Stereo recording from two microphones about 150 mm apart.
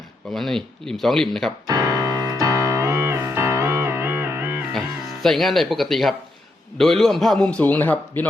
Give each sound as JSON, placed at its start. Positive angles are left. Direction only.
{"t": 0.3, "sound": "a man's voice", "side_deg": 0}
{"t": 1.6, "sound": "music", "side_deg": -25}
{"t": 5.2, "sound": "a man's voice", "side_deg": 0}